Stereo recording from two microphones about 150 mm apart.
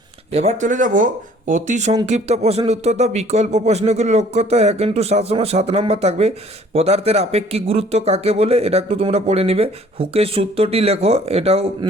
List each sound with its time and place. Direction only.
0.3 s speech: 45° right (ahead or behind)